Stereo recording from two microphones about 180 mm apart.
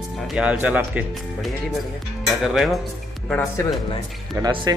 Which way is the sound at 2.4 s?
Centre (ahead or behind).